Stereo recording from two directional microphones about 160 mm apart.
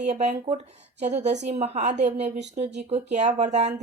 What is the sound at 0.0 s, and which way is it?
A woman's voice, 45° right (ahead or behind).